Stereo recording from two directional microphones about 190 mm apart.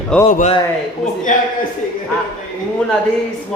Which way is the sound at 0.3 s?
35° left (ahead or behind).